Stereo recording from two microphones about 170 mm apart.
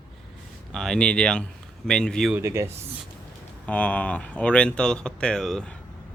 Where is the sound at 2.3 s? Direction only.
15° right (ahead or behind).